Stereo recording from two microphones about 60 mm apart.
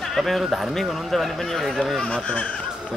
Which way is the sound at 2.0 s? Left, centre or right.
Centre.